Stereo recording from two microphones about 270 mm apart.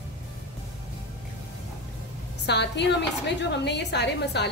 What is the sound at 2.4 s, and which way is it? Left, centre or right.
A woman's voice, left.